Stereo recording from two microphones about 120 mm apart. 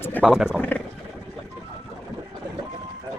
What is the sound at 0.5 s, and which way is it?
Speech, 15° left (ahead or behind).